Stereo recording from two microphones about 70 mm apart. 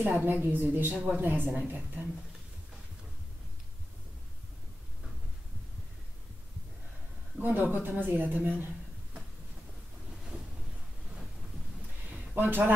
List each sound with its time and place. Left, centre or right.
0.0 s a woman's voice: right
7.3 s a woman's voice: right
12.4 s a woman's voice: right